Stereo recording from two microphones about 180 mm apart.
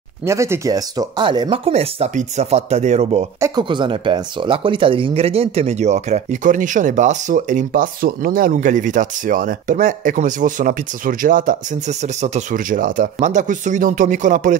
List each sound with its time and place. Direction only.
0.2 s speech: 15° right (ahead or behind)
1.7 s speech: 35° right (ahead or behind)
3.3 s speech: 15° right (ahead or behind)
3.6 s speech: 25° right (ahead or behind); by 14.6 s 45° right (ahead or behind)